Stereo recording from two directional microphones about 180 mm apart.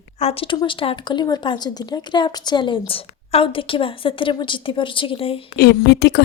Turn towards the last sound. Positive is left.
turn(degrees=65)  # may be behind; listen again after turning